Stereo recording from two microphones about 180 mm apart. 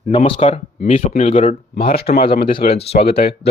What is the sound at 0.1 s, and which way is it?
Speech, 35° left (ahead or behind).